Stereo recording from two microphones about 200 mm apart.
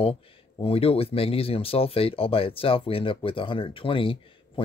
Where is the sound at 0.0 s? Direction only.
30° left (ahead or behind).